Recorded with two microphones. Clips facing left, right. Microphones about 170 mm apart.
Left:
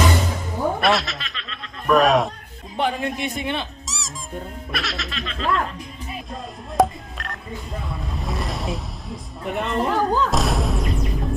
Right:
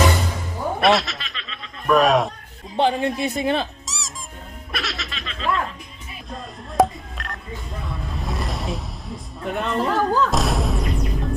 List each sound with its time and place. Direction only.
0.8 s speech: centre (ahead or behind)
2.7 s speech: 30° right (ahead or behind)
3.8 s squeak: centre (ahead or behind)
4.7 s music: centre (ahead or behind)
6.3 s telephone dialing: centre (ahead or behind)
8.1 s a sound: centre (ahead or behind)
10.2 s music: centre (ahead or behind)